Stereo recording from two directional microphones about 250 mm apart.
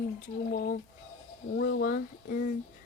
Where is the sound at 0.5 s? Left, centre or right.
Left.